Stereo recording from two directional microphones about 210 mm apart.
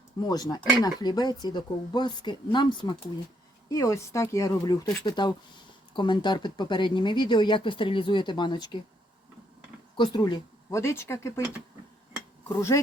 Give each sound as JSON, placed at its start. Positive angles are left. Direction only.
{"t": 0.2, "sound": "speech", "side_deg": 20}
{"t": 10.0, "sound": "speech", "side_deg": 20}
{"t": 12.5, "sound": "speech", "side_deg": 15}